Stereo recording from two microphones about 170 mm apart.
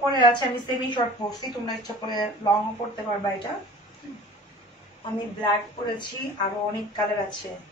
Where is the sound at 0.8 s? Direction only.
25° left (ahead or behind).